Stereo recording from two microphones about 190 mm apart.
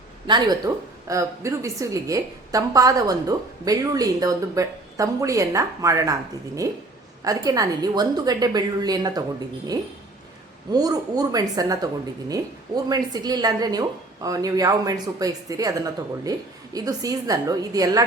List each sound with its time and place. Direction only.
0.3 s a woman's voice: 20° right (ahead or behind)
7.3 s a woman's voice: 20° right (ahead or behind)
10.7 s a woman's voice: 20° right (ahead or behind)